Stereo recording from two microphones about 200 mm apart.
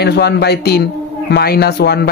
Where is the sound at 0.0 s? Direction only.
55° left (ahead or behind).